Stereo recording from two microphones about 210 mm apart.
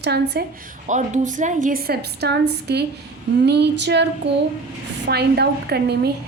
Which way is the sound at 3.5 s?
55° right (ahead or behind).